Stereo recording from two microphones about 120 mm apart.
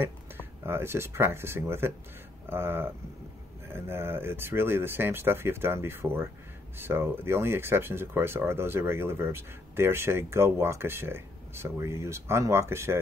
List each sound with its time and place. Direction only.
0.7 s speech: 20° right (ahead or behind)